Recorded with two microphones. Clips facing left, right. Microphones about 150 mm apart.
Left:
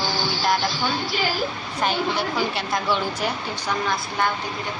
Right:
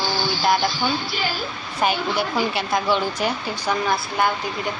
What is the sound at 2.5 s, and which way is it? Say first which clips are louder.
Speech: right 3 dB; centre (ahead or behind).